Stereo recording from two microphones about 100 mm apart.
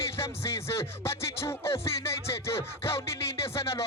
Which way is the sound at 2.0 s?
25° left (ahead or behind).